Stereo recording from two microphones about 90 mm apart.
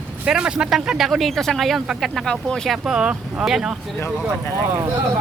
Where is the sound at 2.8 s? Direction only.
10° right (ahead or behind).